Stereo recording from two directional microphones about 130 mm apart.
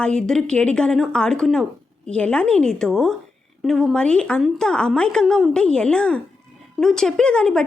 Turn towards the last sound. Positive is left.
turn(degrees=5)  # may be behind; listen again after turning